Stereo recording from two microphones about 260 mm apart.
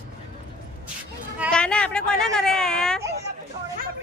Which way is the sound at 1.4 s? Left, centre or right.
Centre.